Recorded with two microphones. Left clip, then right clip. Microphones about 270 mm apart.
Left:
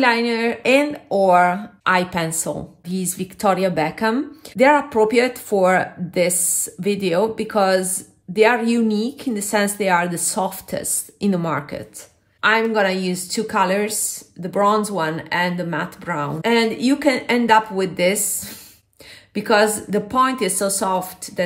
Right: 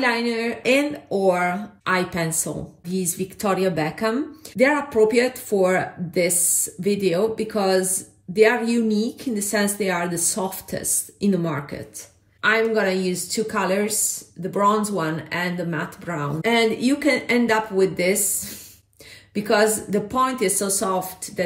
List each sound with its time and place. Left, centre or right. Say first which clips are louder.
0.0 s a woman's voice: left 4 dB; centre
19.3 s a woman's voice: left 3 dB; left